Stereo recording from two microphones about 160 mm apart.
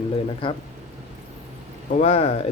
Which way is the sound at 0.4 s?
35° left (ahead or behind).